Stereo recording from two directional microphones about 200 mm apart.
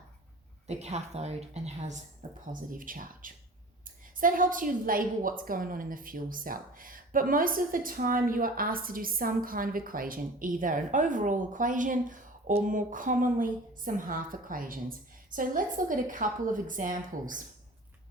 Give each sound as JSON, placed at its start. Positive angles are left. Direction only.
{"t": 0.7, "sound": "a woman's voice", "side_deg": -30}